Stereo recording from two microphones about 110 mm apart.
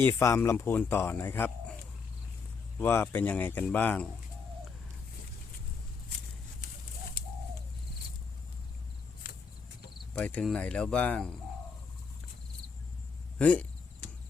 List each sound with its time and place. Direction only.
0.0 s speech: 25° left (ahead or behind)
2.7 s speech: 20° left (ahead or behind)
10.2 s speech: 10° left (ahead or behind)
13.4 s speech: 10° left (ahead or behind)